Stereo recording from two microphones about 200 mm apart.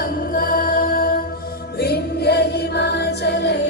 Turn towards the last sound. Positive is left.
turn(degrees=55)  # may be behind; listen again after turning